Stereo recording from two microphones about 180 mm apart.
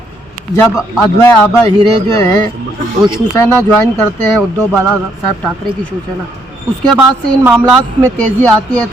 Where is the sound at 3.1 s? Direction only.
15° left (ahead or behind).